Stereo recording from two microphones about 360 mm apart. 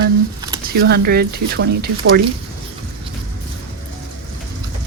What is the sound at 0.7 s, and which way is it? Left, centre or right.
Speech, right.